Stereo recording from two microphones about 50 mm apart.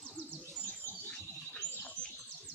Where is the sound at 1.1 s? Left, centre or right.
Left.